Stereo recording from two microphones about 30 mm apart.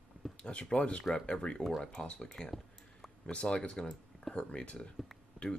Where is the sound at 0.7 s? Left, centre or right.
Left.